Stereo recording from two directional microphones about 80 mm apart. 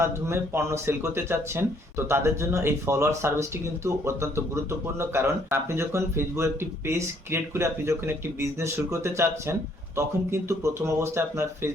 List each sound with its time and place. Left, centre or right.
0.0 s speech: right